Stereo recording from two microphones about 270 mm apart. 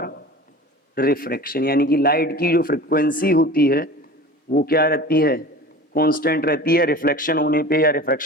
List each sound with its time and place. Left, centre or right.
0.9 s speech: left